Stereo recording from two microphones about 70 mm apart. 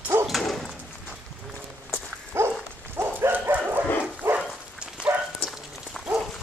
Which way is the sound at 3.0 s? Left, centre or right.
Right.